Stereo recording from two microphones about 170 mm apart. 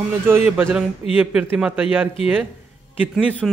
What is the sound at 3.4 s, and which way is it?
Speech, centre (ahead or behind).